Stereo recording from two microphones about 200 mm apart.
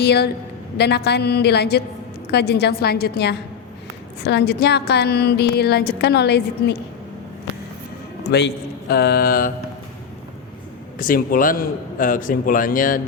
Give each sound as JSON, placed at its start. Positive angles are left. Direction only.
{"t": 0.0, "sound": "a woman's voice", "side_deg": 55}
{"t": 8.3, "sound": "a man's voice", "side_deg": 55}
{"t": 10.9, "sound": "a man's voice", "side_deg": 45}